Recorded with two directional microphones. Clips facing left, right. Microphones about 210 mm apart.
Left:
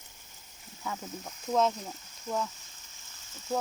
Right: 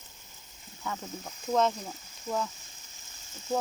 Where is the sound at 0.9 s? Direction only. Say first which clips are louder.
Right 1 dB; 5° left (ahead or behind).